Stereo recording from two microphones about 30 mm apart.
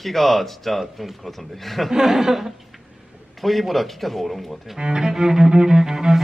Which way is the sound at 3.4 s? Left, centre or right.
Centre.